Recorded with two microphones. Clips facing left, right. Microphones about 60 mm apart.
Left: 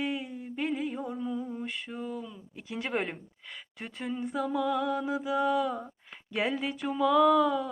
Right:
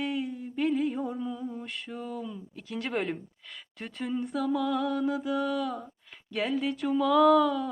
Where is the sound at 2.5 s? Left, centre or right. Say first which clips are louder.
Even; centre.